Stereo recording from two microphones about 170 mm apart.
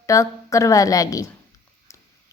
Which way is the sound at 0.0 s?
20° left (ahead or behind).